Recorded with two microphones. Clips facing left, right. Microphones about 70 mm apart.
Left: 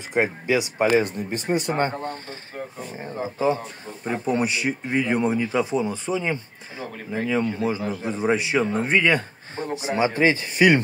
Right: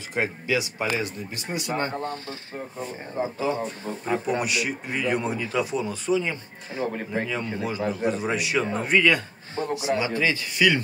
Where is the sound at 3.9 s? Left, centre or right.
Right.